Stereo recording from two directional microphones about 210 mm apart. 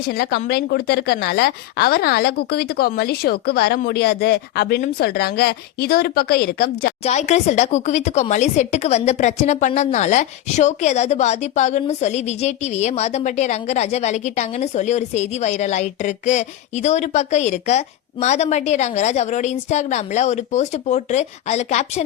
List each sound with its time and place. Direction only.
0.1 s speech: 50° left (ahead or behind)
7.0 s speech: 35° left (ahead or behind)